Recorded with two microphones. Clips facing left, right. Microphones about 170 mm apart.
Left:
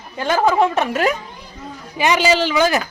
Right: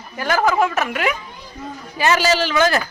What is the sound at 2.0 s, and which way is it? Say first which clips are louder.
Speech: left 1 dB; 15° left (ahead or behind).